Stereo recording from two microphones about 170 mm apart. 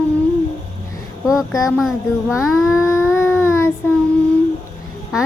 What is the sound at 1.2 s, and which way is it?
Speech, 5° right (ahead or behind).